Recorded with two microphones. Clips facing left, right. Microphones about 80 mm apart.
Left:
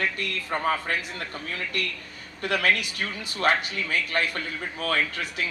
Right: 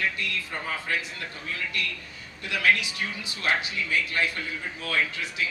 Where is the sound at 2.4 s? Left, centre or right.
Left.